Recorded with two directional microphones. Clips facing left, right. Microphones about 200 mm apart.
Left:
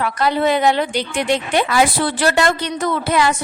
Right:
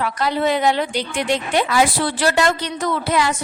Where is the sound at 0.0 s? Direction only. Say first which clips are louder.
Left 2 dB; 60° left (ahead or behind).